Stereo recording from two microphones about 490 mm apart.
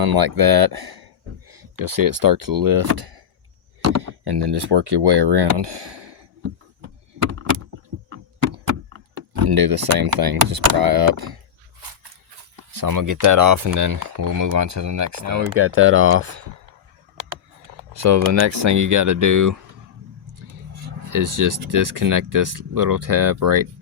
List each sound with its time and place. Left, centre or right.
0.0 s speech: right
9.5 s speech: right
12.7 s speech: right
17.9 s speech: right
21.1 s speech: right